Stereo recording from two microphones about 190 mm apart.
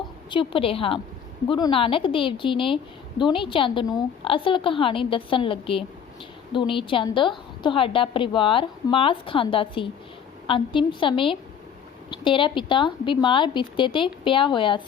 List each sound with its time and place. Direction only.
0.3 s a woman's voice: 25° left (ahead or behind)